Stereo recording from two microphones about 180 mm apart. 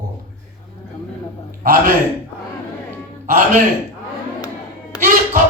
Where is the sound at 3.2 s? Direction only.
45° right (ahead or behind).